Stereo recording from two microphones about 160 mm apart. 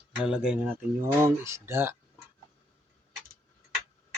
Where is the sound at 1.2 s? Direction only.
15° right (ahead or behind).